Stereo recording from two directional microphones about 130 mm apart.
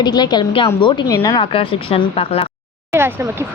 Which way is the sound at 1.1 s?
30° left (ahead or behind).